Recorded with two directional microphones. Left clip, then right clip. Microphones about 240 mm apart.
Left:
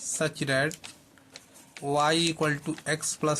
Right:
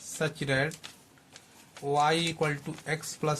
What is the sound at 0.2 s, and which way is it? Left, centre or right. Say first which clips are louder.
Speech: left 2 dB; left.